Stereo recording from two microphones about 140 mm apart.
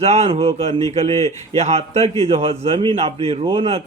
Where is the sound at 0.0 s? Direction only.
50° right (ahead or behind).